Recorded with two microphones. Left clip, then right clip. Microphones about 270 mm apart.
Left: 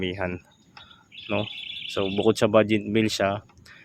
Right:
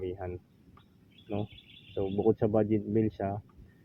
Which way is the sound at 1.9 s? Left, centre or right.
Left.